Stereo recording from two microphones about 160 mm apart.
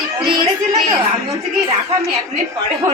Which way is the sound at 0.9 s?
20° right (ahead or behind).